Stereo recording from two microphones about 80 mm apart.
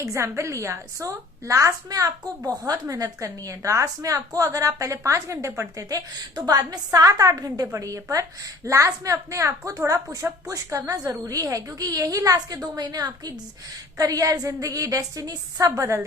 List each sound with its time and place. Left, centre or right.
0.0 s a woman's voice: right
6.3 s a woman's voice: right